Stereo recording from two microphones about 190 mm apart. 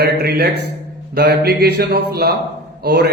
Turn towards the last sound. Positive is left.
turn(degrees=-60)  # may be behind; listen again after turning